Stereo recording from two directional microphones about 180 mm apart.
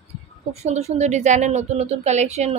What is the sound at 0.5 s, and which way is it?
Speech, 40° right (ahead or behind).